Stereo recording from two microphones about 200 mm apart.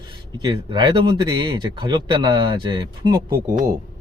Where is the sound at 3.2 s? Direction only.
45° right (ahead or behind).